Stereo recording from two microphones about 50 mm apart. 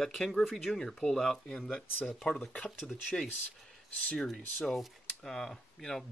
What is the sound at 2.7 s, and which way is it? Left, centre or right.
Speech, centre.